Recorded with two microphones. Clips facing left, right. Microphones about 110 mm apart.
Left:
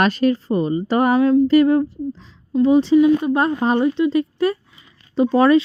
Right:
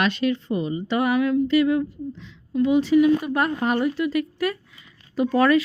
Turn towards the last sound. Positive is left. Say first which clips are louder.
# left 4 dB
turn(degrees=30)  # may be behind; listen again after turning